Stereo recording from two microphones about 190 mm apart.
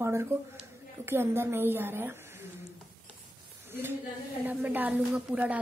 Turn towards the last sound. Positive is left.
turn(degrees=-5)  # may be behind; listen again after turning